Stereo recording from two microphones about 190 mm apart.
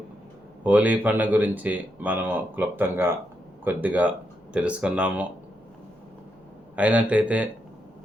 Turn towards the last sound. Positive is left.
turn(degrees=-5)  # may be behind; listen again after turning